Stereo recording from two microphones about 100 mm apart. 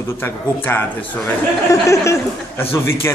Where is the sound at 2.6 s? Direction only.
25° left (ahead or behind).